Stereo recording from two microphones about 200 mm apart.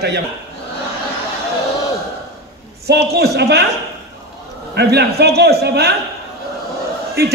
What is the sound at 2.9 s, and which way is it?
Speech, 55° right (ahead or behind).